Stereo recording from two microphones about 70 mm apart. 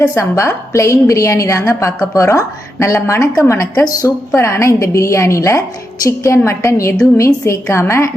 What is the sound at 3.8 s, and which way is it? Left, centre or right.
Speech, left.